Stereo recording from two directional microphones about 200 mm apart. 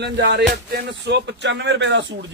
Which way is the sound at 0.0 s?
55° right (ahead or behind).